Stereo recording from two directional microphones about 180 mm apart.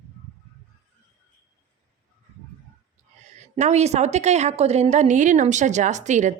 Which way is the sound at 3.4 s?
40° right (ahead or behind).